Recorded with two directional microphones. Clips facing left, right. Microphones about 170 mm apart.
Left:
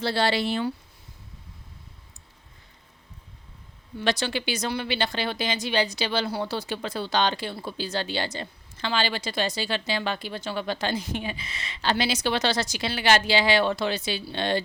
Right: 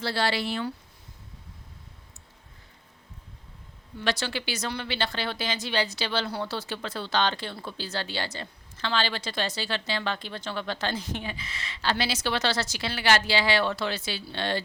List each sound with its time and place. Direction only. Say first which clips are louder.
0.0 s speech: left 3 dB; 25° left (ahead or behind)
4.0 s speech: left 3 dB; 20° left (ahead or behind)